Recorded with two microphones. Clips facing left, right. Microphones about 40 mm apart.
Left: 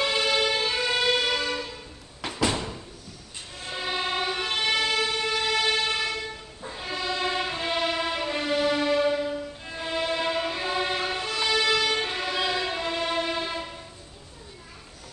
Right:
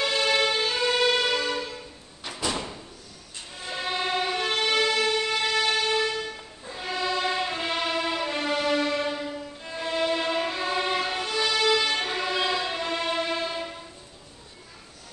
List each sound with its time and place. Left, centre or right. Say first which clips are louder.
0.0 s music: right 1 dB; centre
2.4 s door: left 3 dB; left
3.6 s music: right 1 dB; centre
9.7 s violin: right 3 dB; centre